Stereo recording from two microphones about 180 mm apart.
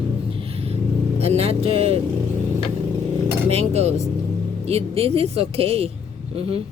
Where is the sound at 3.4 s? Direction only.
35° right (ahead or behind).